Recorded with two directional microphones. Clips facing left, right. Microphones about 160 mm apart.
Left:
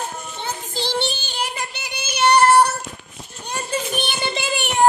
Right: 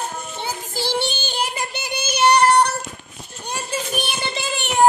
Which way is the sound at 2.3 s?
5° left (ahead or behind).